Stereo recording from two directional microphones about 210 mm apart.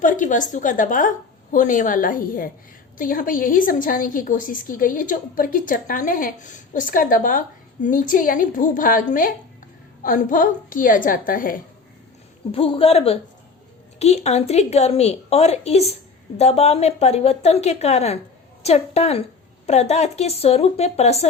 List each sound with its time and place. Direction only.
0.0 s a woman's voice: 40° left (ahead or behind)
12.5 s a man's voice: 25° left (ahead or behind)